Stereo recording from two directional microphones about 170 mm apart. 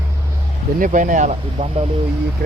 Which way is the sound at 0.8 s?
50° right (ahead or behind).